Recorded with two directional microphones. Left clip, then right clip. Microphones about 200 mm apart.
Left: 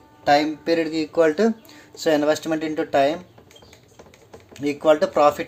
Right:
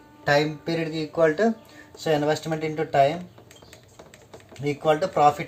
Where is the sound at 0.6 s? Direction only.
55° left (ahead or behind).